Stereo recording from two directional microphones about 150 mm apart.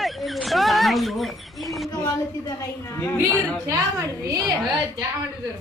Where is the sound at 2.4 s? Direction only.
20° left (ahead or behind).